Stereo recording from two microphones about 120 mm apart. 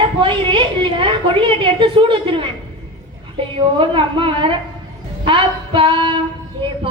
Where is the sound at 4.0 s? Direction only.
45° right (ahead or behind).